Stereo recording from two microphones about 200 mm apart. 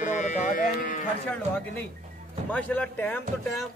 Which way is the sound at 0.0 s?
35° left (ahead or behind).